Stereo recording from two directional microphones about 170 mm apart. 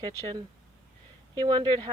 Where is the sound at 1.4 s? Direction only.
25° right (ahead or behind).